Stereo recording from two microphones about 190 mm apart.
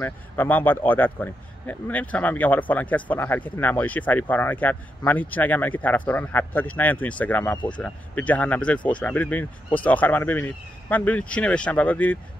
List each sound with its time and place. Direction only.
0.0 s speech: 10° left (ahead or behind)
7.5 s speech: 25° left (ahead or behind)
7.8 s speech: 10° left (ahead or behind)